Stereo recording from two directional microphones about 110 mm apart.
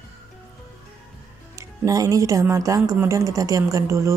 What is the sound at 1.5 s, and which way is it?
A woman's voice, 30° right (ahead or behind).